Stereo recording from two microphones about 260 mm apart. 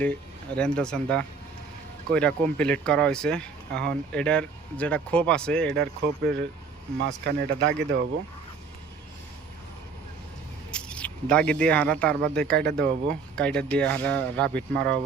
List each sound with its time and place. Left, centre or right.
0.0 s speech: centre
5.7 s speech: right
10.7 s speech: centre